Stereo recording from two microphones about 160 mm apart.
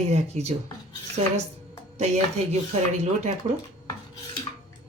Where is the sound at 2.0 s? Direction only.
45° right (ahead or behind).